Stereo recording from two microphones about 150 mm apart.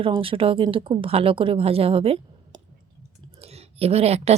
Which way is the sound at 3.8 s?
45° right (ahead or behind).